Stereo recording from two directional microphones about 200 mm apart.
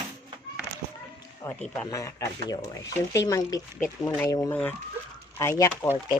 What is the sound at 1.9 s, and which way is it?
Speech, 15° left (ahead or behind).